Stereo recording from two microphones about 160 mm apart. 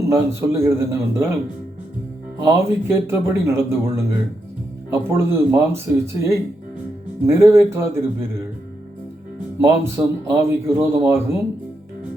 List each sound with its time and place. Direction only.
0.0 s speech: 15° right (ahead or behind)
2.4 s speech: 15° right (ahead or behind)
9.6 s speech: 15° right (ahead or behind)